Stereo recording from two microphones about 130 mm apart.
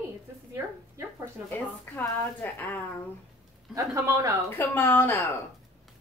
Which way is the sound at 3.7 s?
25° right (ahead or behind).